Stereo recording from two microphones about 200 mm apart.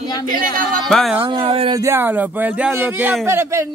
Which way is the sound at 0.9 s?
Centre (ahead or behind).